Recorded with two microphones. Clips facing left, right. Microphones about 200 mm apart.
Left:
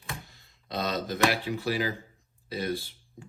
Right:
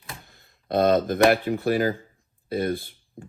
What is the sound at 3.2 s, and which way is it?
Music, 50° right (ahead or behind).